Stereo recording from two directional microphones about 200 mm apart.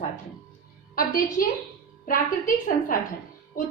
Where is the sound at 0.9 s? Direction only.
45° left (ahead or behind).